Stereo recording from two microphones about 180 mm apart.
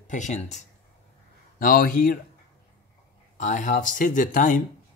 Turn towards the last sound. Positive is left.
turn(degrees=45)  # may be behind; listen again after turning